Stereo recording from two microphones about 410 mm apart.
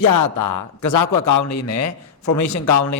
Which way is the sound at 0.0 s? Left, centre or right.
Left.